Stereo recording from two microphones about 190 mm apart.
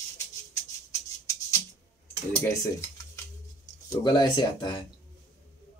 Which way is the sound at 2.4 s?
15° left (ahead or behind).